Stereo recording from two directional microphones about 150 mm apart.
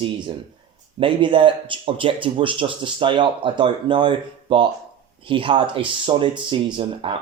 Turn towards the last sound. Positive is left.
turn(degrees=-35)  # may be behind; listen again after turning